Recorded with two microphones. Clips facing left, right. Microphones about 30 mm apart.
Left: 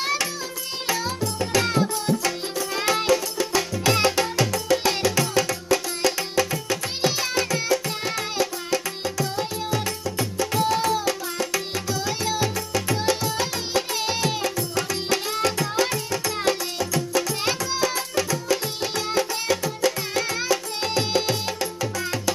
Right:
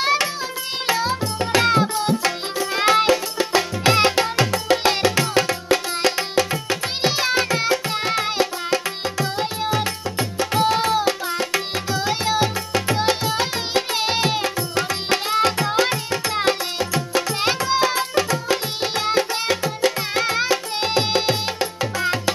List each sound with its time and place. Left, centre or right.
0.0 s music: right